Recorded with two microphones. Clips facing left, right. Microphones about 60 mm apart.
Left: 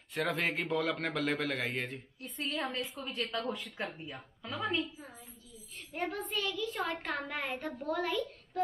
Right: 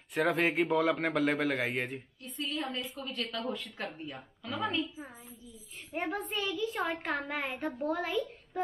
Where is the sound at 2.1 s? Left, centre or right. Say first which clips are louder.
Right 1 dB; left.